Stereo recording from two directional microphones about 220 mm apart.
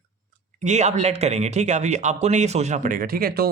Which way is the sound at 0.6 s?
30° right (ahead or behind).